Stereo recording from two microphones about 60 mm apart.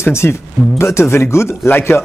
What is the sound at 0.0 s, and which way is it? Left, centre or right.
Speech, left.